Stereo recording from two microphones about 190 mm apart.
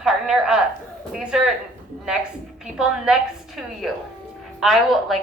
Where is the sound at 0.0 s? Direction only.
5° right (ahead or behind).